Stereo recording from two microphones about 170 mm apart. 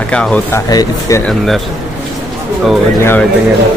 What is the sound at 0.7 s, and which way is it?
Speech, 20° left (ahead or behind).